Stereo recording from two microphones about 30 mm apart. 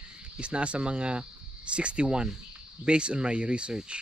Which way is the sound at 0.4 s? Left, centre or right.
Right.